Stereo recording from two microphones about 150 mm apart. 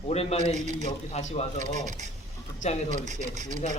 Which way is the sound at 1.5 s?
55° right (ahead or behind).